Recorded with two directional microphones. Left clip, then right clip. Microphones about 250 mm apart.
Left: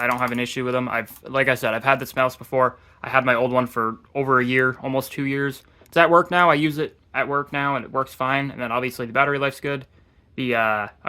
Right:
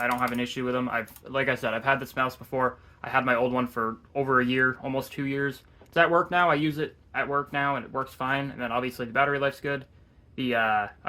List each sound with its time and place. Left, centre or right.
0.0 s speech: left